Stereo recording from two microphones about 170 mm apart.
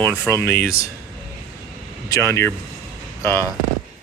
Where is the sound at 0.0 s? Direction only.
15° left (ahead or behind).